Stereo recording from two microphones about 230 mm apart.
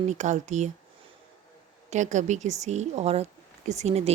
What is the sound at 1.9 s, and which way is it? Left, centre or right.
A woman's voice, right.